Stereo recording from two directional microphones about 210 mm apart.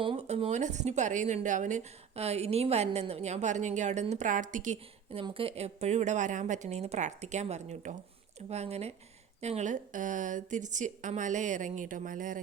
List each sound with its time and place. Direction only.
0.0 s speech: 30° right (ahead or behind)